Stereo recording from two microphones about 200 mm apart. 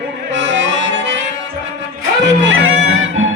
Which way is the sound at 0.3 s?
65° right (ahead or behind).